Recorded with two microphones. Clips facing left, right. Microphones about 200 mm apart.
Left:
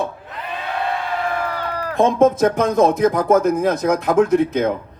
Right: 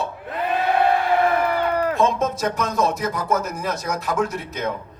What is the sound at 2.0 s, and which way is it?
Speech, 55° left (ahead or behind).